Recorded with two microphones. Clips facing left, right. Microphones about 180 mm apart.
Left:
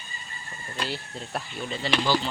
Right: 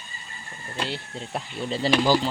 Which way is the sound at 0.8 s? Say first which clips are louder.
Right 2 dB; 20° right (ahead or behind).